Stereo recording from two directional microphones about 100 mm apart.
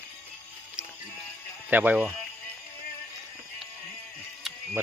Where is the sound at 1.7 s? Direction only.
15° right (ahead or behind).